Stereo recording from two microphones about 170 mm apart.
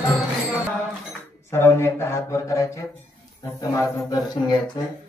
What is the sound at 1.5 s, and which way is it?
Music, 15° left (ahead or behind).